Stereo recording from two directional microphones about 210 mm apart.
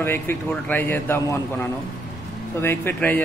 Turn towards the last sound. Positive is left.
turn(degrees=10)  # may be behind; listen again after turning